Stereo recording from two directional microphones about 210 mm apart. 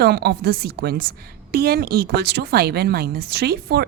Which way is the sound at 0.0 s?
50° right (ahead or behind).